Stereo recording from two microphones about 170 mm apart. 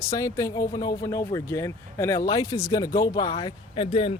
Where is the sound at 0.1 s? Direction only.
20° left (ahead or behind).